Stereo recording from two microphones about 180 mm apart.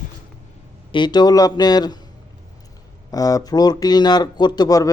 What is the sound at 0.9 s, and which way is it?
Speech, 25° left (ahead or behind).